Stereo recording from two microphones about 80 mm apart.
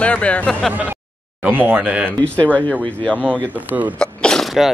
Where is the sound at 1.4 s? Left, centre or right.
Right.